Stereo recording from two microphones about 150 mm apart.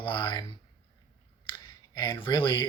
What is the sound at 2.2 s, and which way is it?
Speech, 30° left (ahead or behind).